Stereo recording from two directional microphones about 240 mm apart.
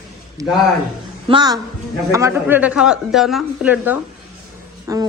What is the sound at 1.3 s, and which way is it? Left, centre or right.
A woman's voice, centre.